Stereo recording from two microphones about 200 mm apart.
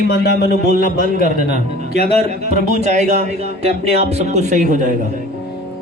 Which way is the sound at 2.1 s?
35° right (ahead or behind).